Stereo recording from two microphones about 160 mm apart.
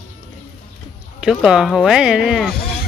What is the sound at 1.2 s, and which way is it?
Speech, 5° right (ahead or behind).